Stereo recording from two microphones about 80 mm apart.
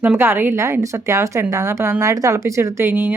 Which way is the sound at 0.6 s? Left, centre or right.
Right.